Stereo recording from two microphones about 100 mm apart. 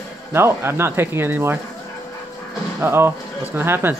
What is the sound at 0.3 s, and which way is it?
Speech, 25° right (ahead or behind).